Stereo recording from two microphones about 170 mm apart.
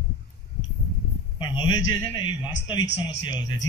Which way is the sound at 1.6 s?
30° left (ahead or behind).